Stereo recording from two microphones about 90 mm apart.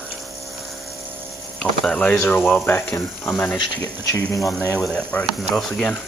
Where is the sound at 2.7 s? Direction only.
25° left (ahead or behind).